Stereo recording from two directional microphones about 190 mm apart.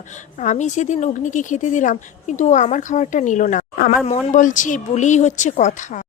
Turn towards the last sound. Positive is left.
turn(degrees=40)  # may be behind; listen again after turning